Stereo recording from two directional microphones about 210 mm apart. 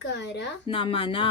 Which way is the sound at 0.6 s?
25° left (ahead or behind).